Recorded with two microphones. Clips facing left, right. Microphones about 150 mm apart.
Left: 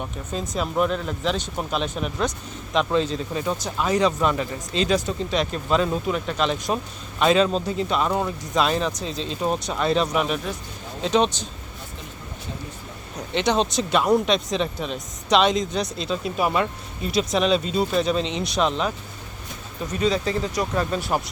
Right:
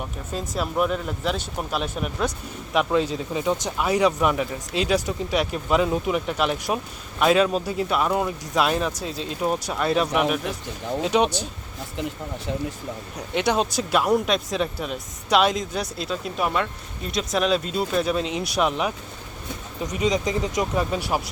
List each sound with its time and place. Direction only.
0.0 s speech: 5° right (ahead or behind)
13.3 s speech: 10° right (ahead or behind)